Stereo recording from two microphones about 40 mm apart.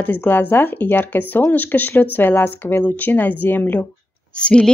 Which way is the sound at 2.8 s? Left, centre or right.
Left.